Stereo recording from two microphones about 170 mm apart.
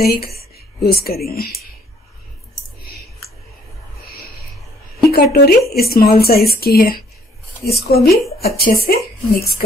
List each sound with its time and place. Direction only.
0.0 s speech: 65° left (ahead or behind)
5.1 s a woman's voice: 65° left (ahead or behind)